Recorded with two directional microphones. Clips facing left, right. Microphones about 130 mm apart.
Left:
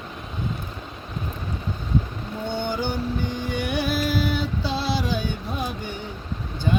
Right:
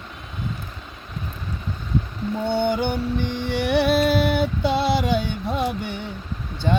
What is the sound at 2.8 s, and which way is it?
Music, 60° right (ahead or behind).